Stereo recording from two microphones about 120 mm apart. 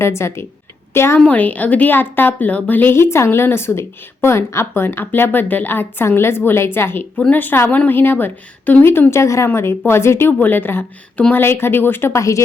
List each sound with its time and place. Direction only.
0.0 s a woman's voice: 25° left (ahead or behind)